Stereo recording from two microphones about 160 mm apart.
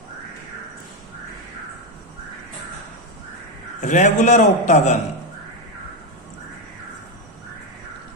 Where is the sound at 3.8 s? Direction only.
50° left (ahead or behind).